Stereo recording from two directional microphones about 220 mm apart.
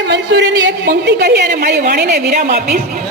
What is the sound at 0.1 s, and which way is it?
A woman's voice, 50° right (ahead or behind).